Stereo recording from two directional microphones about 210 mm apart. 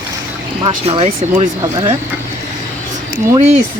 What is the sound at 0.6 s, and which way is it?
Speech, 25° right (ahead or behind).